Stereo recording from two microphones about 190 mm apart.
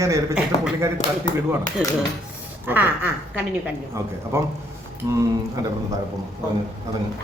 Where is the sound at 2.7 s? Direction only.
10° right (ahead or behind).